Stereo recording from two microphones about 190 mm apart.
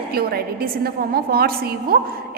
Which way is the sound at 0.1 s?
55° right (ahead or behind).